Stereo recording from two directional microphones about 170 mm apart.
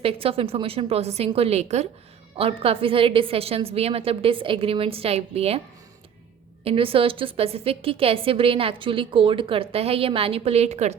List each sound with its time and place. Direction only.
0.0 s a woman's voice: 35° right (ahead or behind)
6.7 s a woman's voice: 35° right (ahead or behind)